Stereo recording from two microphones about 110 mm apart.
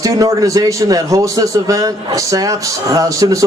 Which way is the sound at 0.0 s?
30° right (ahead or behind).